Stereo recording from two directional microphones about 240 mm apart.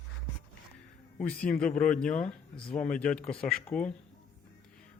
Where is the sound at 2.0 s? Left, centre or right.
Left.